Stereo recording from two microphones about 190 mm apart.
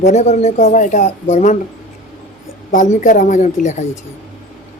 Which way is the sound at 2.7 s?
40° left (ahead or behind).